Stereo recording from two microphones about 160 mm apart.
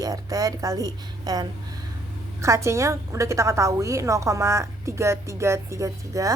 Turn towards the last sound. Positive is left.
turn(degrees=-20)  # may be behind; listen again after turning